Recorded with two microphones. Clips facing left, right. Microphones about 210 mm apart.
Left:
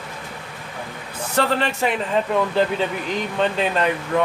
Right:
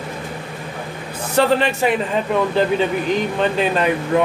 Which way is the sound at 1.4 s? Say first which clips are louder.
Right 5 dB; 10° right (ahead or behind).